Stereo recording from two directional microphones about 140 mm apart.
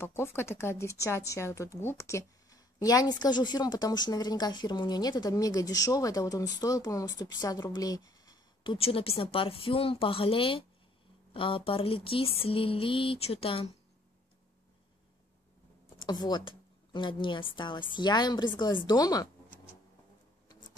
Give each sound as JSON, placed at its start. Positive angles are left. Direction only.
{"t": 0.0, "sound": "a woman's voice", "side_deg": 20}
{"t": 8.7, "sound": "a woman's voice", "side_deg": 40}
{"t": 16.1, "sound": "a woman's voice", "side_deg": 30}